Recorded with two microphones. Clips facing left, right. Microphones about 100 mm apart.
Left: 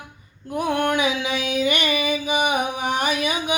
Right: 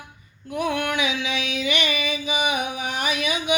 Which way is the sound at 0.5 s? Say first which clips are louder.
Left 3 dB; 40° left (ahead or behind).